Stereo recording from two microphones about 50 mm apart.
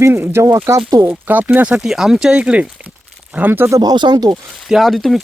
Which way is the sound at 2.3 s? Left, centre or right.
Right.